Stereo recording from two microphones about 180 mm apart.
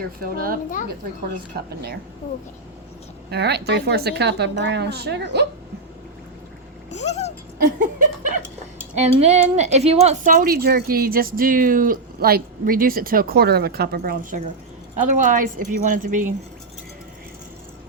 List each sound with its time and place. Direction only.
0.2 s a child's voice: 55° right (ahead or behind)
3.2 s a woman's voice: 65° right (ahead or behind)
6.9 s speech: 40° left (ahead or behind)
7.6 s chuckle: 45° right (ahead or behind)
9.0 s speech: 40° right (ahead or behind)